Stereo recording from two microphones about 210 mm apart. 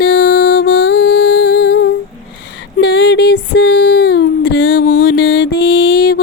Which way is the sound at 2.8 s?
50° left (ahead or behind).